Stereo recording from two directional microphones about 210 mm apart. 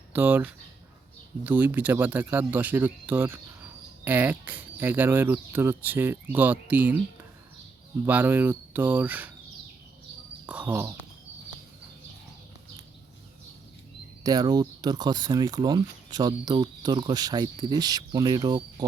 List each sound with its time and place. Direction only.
0.1 s speech: 10° right (ahead or behind)
8.0 s speech: 10° right (ahead or behind)
10.4 s speech: 5° right (ahead or behind)
14.3 s speech: 20° right (ahead or behind)